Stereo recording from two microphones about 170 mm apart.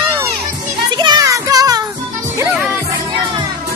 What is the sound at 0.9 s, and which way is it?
Music, 20° right (ahead or behind).